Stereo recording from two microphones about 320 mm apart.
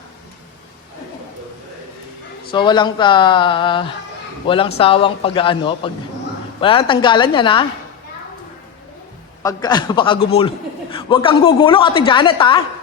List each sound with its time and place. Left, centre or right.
2.5 s a woman's voice: centre
9.4 s a woman's voice: centre